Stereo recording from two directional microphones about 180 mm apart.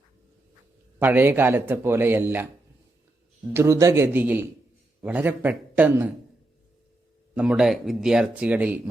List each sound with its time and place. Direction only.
0.9 s speech: 10° right (ahead or behind)
3.5 s speech: 15° right (ahead or behind)
7.3 s speech: 5° right (ahead or behind)